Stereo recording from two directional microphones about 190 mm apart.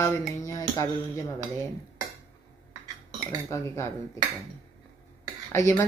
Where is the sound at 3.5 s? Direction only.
15° left (ahead or behind).